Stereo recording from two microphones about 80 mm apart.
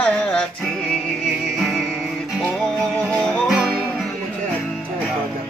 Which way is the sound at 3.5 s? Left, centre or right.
Centre.